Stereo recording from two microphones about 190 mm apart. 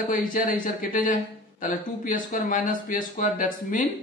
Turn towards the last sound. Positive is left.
turn(degrees=45)  # may be behind; listen again after turning